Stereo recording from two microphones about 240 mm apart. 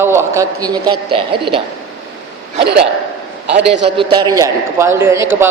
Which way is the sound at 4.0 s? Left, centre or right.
Centre.